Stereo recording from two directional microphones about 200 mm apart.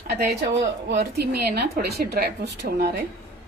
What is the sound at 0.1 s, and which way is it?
A woman's voice, 55° right (ahead or behind).